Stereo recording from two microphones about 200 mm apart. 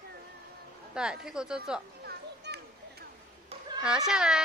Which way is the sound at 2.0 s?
55° right (ahead or behind).